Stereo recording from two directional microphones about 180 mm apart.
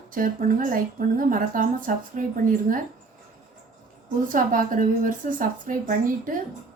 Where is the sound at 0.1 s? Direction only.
50° right (ahead or behind).